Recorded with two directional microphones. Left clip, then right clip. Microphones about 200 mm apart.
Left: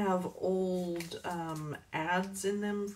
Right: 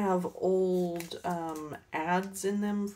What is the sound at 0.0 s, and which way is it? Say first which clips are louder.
Speech: right 3 dB; 45° right (ahead or behind).